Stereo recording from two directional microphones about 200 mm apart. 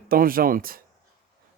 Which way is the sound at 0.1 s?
45° right (ahead or behind).